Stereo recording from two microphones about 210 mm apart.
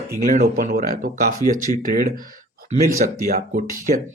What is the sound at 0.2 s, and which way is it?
A man's voice, 40° right (ahead or behind).